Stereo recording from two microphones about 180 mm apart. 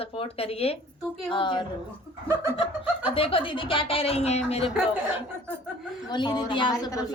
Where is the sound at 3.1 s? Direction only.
30° left (ahead or behind).